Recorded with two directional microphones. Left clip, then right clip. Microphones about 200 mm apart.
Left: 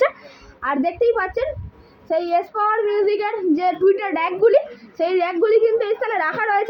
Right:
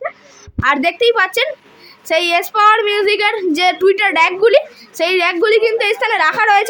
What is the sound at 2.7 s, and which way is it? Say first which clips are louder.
A woman's voice: right 5 dB; 10° right (ahead or behind).